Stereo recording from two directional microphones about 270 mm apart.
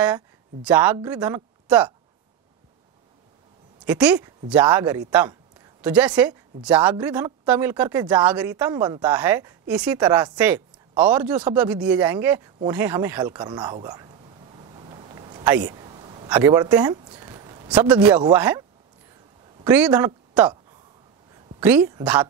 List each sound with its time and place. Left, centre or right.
0.7 s a woman's voice: centre
3.8 s a woman's voice: centre
12.6 s a sound: centre
17.9 s a woman's voice: centre
19.6 s speech: centre
21.6 s speech: centre